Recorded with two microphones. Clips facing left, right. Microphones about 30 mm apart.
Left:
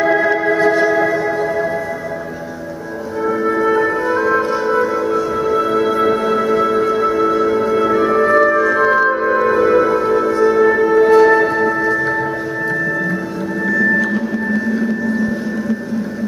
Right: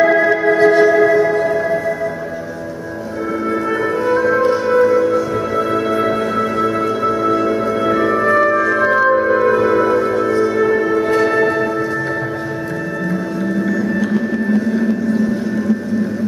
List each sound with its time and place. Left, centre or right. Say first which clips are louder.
0.0 s music: right 2 dB; centre
0.6 s music: right 5 dB; centre
0.8 s music: right 3 dB; centre
3.7 s music: left 1 dB; centre